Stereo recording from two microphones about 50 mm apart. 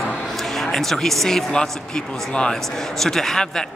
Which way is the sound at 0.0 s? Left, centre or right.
Centre.